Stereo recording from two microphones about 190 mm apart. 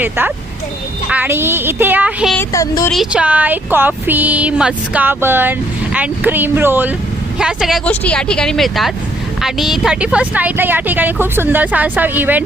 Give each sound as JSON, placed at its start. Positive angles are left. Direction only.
{"t": 0.0, "sound": "speech", "side_deg": -10}
{"t": 2.3, "sound": "speech", "side_deg": 15}
{"t": 2.9, "sound": "speech", "side_deg": -5}